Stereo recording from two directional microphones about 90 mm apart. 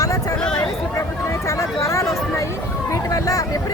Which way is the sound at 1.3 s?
35° left (ahead or behind).